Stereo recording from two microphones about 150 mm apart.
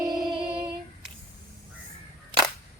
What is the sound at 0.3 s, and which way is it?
Female singing, 35° right (ahead or behind).